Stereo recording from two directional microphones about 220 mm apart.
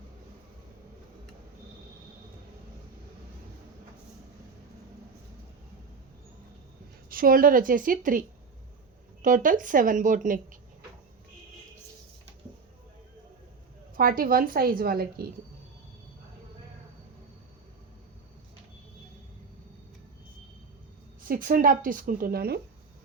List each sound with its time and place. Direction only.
7.1 s a woman's voice: 40° right (ahead or behind)
9.2 s a woman's voice: 35° right (ahead or behind)
13.9 s a woman's voice: 40° right (ahead or behind)
21.2 s a woman's voice: 40° right (ahead or behind)